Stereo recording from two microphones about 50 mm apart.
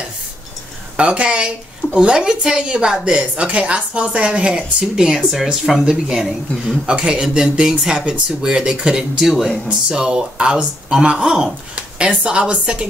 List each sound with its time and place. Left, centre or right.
0.9 s speech: right
11.7 s speech: right